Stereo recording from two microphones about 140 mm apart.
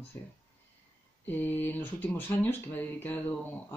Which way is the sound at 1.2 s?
15° left (ahead or behind).